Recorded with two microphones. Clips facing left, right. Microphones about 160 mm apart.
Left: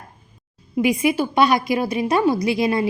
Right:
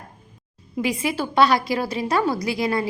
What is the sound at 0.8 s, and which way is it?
A woman's voice, 15° left (ahead or behind).